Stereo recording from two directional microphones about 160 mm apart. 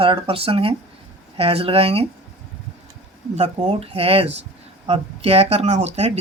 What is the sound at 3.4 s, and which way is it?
Speech, 35° right (ahead or behind).